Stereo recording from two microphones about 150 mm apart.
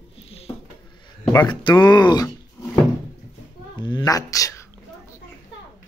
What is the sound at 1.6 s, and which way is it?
Speech, 30° left (ahead or behind).